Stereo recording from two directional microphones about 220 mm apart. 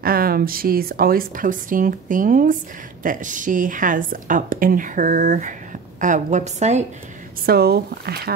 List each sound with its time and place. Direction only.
0.0 s a woman's voice: 40° right (ahead or behind)
7.4 s speech: 45° right (ahead or behind)